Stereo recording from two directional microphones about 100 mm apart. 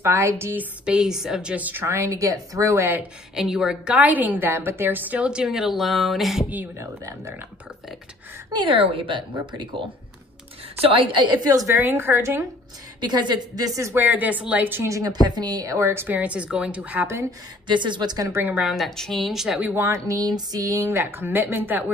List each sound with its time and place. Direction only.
0.0 s a woman's voice: 25° right (ahead or behind)
0.8 s a woman's voice: 5° right (ahead or behind); by 2.9 s 30° right (ahead or behind)
3.3 s a woman's voice: 5° right (ahead or behind)
6.8 s a woman's voice: 30° right (ahead or behind)
8.6 s speech: 65° right (ahead or behind); by 11.5 s 50° right (ahead or behind)
11.5 s a woman's voice: 30° right (ahead or behind)
13.0 s a woman's voice: 45° right (ahead or behind); by 14.0 s 30° right (ahead or behind)
14.0 s a woman's voice: 15° right (ahead or behind)
14.9 s a woman's voice: 35° right (ahead or behind); by 17.3 s 20° right (ahead or behind)
17.6 s speech: 50° right (ahead or behind)
18.3 s a woman's voice: 20° right (ahead or behind)
18.6 s a woman's voice: centre (ahead or behind)
19.8 s a woman's voice: 30° right (ahead or behind)
20.8 s a woman's voice: 20° right (ahead or behind)